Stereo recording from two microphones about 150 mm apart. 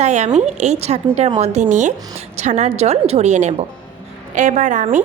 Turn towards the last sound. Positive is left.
turn(degrees=-60)  # may be behind; listen again after turning